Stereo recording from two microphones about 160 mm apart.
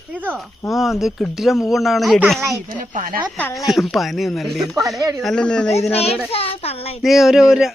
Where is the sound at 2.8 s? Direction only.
55° right (ahead or behind).